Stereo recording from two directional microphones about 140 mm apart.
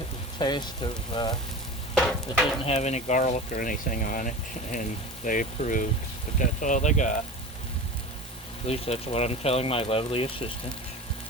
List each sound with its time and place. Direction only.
0.3 s speech: 35° left (ahead or behind)
2.6 s speech: 50° left (ahead or behind)
8.6 s speech: 45° left (ahead or behind)